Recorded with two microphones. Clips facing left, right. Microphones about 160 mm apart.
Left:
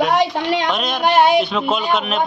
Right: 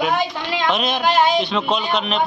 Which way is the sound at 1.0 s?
65° left (ahead or behind).